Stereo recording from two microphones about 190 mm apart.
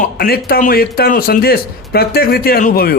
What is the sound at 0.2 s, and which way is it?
Speech, 50° left (ahead or behind).